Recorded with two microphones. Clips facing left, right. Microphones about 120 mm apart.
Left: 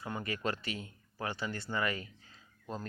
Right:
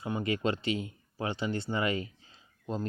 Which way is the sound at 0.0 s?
20° right (ahead or behind).